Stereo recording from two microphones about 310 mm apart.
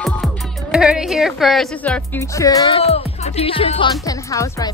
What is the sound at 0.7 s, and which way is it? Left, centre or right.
Speech, centre.